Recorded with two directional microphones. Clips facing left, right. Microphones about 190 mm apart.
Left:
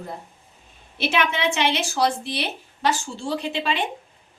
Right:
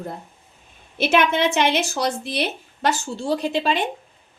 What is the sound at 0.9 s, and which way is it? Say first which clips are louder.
A woman's voice: right 5 dB; 45° right (ahead or behind).